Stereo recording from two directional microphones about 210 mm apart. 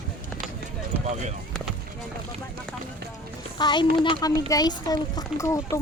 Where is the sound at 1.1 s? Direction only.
35° right (ahead or behind).